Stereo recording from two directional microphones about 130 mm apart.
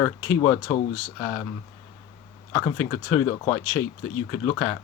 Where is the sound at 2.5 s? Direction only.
25° left (ahead or behind).